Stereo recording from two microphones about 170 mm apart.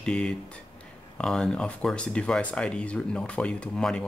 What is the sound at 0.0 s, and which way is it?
Speech, 5° left (ahead or behind).